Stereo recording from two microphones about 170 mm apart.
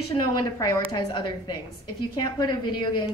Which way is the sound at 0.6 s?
25° left (ahead or behind).